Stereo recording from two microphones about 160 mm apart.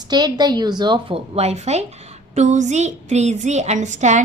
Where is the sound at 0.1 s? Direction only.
25° right (ahead or behind).